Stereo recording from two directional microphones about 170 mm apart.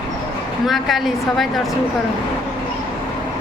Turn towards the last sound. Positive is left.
turn(degrees=0)  # may be behind; listen again after turning